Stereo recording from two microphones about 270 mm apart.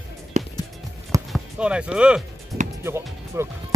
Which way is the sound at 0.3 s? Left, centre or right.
Right.